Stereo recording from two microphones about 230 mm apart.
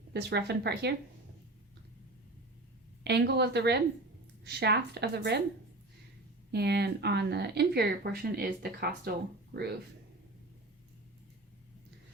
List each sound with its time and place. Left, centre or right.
0.1 s speech: right
3.0 s speech: right
6.5 s speech: right